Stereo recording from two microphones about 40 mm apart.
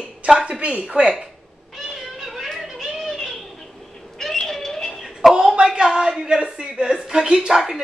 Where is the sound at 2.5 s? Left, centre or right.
Centre.